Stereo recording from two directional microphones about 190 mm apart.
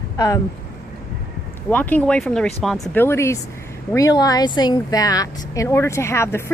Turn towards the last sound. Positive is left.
turn(degrees=15)  # may be behind; listen again after turning